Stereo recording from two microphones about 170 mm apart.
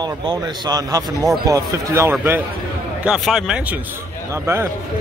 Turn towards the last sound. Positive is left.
turn(degrees=-15)  # may be behind; listen again after turning